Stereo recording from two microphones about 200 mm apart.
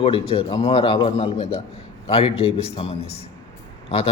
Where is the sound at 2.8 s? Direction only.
30° left (ahead or behind).